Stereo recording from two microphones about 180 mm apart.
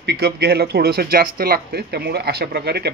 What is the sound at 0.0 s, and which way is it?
Speech, 65° right (ahead or behind).